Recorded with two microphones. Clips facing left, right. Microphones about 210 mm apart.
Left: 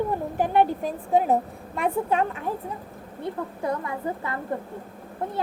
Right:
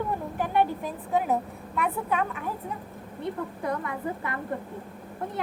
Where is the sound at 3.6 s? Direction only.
25° left (ahead or behind).